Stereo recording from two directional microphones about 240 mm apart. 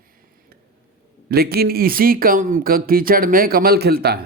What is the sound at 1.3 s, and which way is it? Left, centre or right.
Speech, right.